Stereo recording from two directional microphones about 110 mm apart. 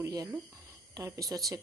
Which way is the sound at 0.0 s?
30° right (ahead or behind).